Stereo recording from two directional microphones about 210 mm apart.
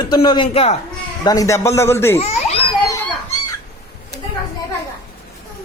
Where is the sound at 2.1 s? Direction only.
30° left (ahead or behind).